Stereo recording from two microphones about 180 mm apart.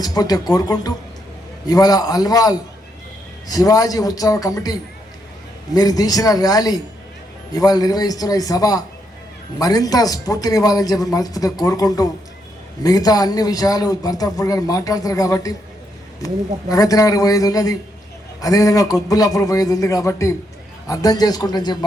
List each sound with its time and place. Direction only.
0.0 s a man's voice: 20° left (ahead or behind)